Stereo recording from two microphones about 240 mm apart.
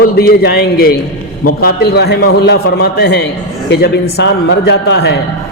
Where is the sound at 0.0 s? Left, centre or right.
Left.